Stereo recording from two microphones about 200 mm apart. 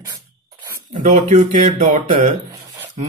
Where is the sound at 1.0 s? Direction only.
40° right (ahead or behind).